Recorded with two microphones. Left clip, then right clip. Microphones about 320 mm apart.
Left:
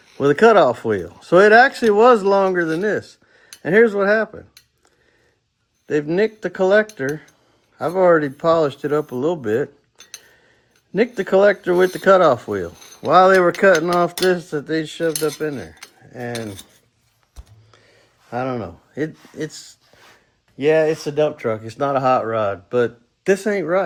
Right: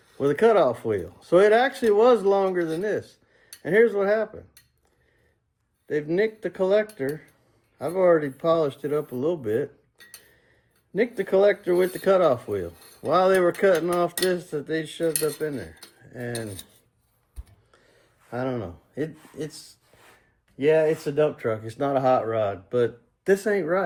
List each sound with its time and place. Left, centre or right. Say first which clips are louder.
0.2 s speech: left 7 dB; left
5.9 s speech: left 5 dB; left
10.9 s speech: left 5 dB; left
18.3 s speech: left 5 dB; left
21.0 s speech: left 4 dB; left